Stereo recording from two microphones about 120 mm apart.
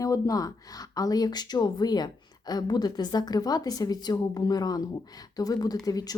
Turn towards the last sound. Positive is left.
turn(degrees=30)  # may be behind; listen again after turning